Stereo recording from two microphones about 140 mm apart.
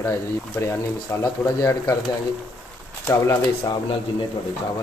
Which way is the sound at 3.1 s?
20° left (ahead or behind).